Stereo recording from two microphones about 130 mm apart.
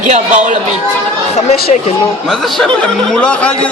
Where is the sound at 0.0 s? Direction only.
70° right (ahead or behind).